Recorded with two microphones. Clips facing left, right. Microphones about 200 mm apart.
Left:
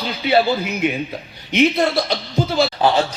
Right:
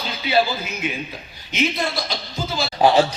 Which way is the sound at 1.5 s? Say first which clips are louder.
Left 7 dB; 60° left (ahead or behind).